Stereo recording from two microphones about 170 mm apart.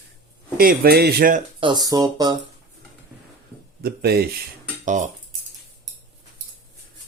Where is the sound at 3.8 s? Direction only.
70° right (ahead or behind).